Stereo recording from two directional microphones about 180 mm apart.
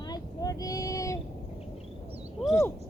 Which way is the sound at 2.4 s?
Centre (ahead or behind).